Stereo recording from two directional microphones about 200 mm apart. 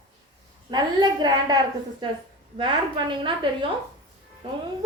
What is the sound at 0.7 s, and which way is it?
A woman's voice, 20° right (ahead or behind).